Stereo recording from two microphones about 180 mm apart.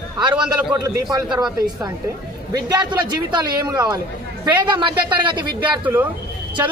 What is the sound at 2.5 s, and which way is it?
A woman's voice, 20° right (ahead or behind).